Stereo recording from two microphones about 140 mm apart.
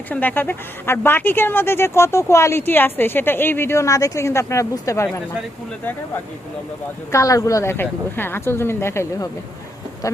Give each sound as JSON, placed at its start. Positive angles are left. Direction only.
{"t": 0.1, "sound": "speech", "side_deg": 10}
{"t": 7.1, "sound": "speech", "side_deg": 25}